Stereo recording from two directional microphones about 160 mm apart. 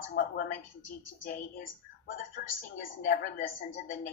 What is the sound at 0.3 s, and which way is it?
Speech, 65° left (ahead or behind).